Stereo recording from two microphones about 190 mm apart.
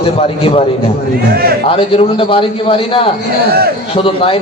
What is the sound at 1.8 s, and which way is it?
A man's voice, 30° left (ahead or behind).